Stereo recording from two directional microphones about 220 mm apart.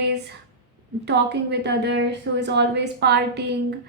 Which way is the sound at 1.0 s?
50° right (ahead or behind).